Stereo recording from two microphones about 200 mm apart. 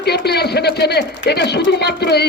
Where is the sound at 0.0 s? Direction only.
55° left (ahead or behind).